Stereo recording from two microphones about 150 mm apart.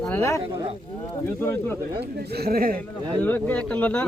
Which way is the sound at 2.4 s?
80° right.